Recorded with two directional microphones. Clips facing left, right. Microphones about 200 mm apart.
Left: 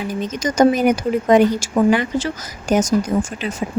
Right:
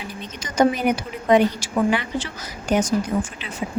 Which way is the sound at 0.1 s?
45° left (ahead or behind).